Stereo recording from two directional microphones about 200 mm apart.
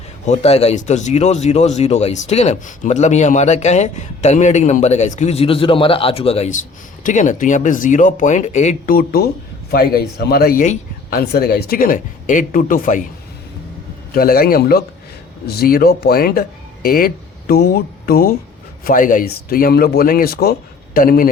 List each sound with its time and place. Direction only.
0.3 s speech: 30° left (ahead or behind)
14.1 s speech: 45° left (ahead or behind)